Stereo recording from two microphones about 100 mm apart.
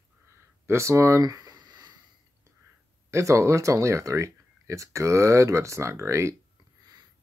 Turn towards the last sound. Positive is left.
turn(degrees=-30)  # may be behind; listen again after turning